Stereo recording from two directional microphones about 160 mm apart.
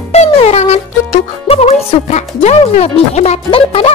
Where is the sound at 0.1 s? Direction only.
40° left (ahead or behind).